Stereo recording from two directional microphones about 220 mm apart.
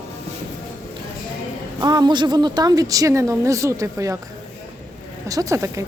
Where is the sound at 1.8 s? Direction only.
20° right (ahead or behind).